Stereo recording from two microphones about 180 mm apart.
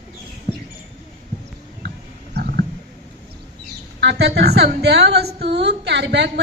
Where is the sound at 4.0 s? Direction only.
70° right (ahead or behind).